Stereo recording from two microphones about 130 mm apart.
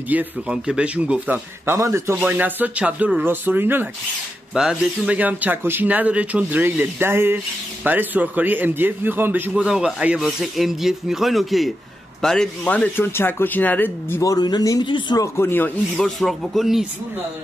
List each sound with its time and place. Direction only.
0.1 s a man's voice: 10° right (ahead or behind); by 14.3 s 15° left (ahead or behind)
14.3 s speech: 30° left (ahead or behind)
15.2 s speech: 20° left (ahead or behind)
16.0 s speech: centre (ahead or behind)